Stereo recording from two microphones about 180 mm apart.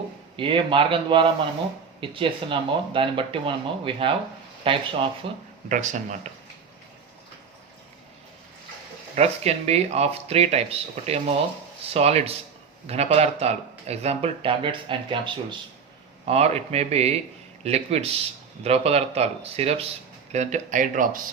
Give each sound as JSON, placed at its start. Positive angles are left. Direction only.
{"t": 0.3, "sound": "speech", "side_deg": -30}
{"t": 5.6, "sound": "speech", "side_deg": -45}
{"t": 9.1, "sound": "speech", "side_deg": -35}